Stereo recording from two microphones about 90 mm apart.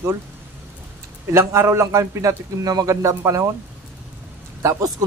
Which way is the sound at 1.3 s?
30° right (ahead or behind).